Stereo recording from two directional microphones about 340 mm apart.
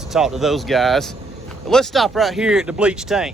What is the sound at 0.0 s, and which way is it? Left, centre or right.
Speech, centre.